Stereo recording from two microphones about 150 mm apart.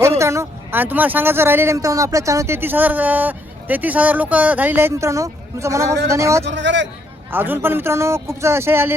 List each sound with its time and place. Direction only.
0.2 s speech: 20° right (ahead or behind)